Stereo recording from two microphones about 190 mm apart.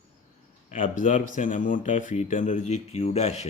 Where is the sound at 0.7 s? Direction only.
40° left (ahead or behind).